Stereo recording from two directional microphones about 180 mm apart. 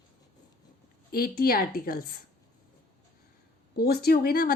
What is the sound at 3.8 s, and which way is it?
Speech, 60° left (ahead or behind).